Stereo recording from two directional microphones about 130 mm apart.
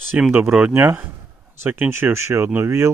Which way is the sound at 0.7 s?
15° right (ahead or behind).